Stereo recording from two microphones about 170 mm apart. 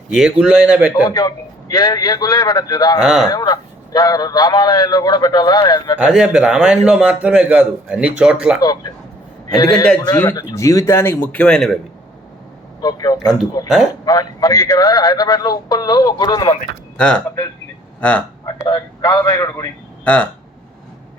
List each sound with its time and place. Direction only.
0.1 s a man's voice: 5° right (ahead or behind)
1.0 s a man's voice: 25° left (ahead or behind)
3.0 s a man's voice: 5° right (ahead or behind)
3.2 s a man's voice: 20° left (ahead or behind)
6.0 s a man's voice: 5° right (ahead or behind)
8.6 s a man's voice: 25° left (ahead or behind); by 11.8 s centre (ahead or behind)
12.8 s a man's voice: 20° left (ahead or behind)
17.0 s a man's voice: 10° left (ahead or behind)
18.4 s a man's voice: 25° left (ahead or behind)